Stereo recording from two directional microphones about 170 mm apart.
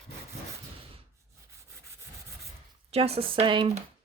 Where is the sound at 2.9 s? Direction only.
35° right (ahead or behind).